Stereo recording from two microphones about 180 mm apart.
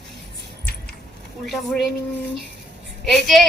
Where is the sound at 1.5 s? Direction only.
Centre (ahead or behind).